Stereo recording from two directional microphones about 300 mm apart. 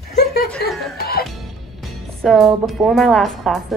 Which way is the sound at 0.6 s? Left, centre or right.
Left.